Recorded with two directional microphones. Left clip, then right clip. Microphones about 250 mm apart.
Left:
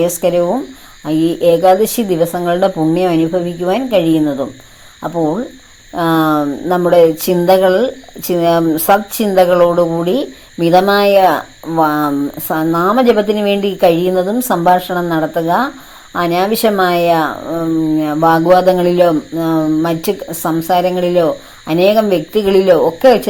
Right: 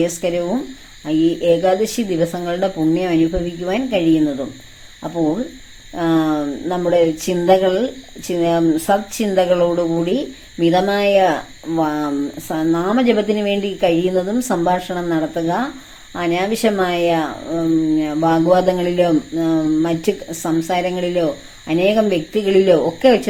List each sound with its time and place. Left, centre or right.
0.0 s speech: centre
5.9 s speech: centre